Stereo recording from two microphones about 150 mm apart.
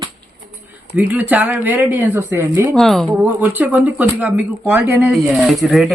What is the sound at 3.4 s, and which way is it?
Speech, 10° right (ahead or behind).